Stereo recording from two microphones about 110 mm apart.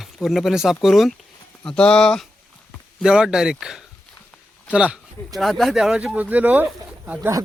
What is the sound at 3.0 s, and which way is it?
Speech, 10° right (ahead or behind).